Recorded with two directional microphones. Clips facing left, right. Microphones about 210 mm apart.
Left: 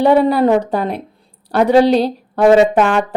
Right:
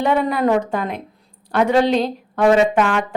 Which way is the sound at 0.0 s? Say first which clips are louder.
Left 6 dB; 35° left (ahead or behind).